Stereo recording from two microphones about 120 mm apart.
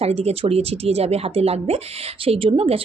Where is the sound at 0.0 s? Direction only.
60° right (ahead or behind).